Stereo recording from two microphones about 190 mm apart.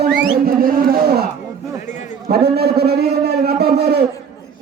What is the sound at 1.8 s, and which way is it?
Speech, 40° left (ahead or behind).